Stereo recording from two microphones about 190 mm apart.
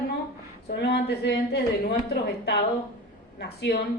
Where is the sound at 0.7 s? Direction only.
60° left (ahead or behind).